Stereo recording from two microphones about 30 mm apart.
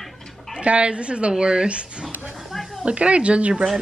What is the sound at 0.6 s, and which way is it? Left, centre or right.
A woman's voice, right.